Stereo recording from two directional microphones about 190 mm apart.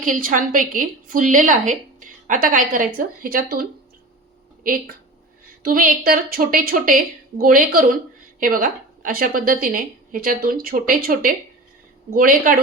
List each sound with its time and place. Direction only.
0.0 s a woman's voice: 45° right (ahead or behind)
5.6 s a woman's voice: 50° right (ahead or behind)